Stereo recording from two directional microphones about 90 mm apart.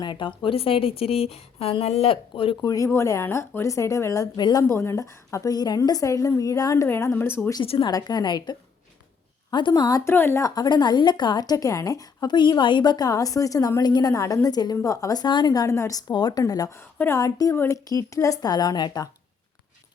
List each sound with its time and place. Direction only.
0.0 s a woman's voice: 60° left (ahead or behind); by 2.6 s 90° left
2.6 s a woman's voice: 40° left (ahead or behind)
2.9 s a woman's voice: 30° left (ahead or behind)
4.4 s a woman's voice: 55° left (ahead or behind)
4.6 s a woman's voice: 30° left (ahead or behind)
6.8 s a woman's voice: 25° left (ahead or behind)
7.6 s a woman's voice: 75° left (ahead or behind)
7.9 s a woman's voice: 50° left (ahead or behind)
10.0 s a woman's voice: 25° left (ahead or behind)
10.5 s a woman's voice: 50° left (ahead or behind)
16.4 s a woman's voice: 40° left (ahead or behind)
17.5 s a woman's voice: 30° left (ahead or behind)
17.8 s a woman's voice: 40° left (ahead or behind)